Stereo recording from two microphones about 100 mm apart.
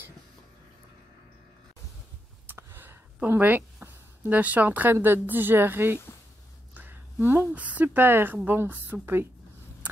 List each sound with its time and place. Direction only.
2.4 s a woman's voice: 20° right (ahead or behind)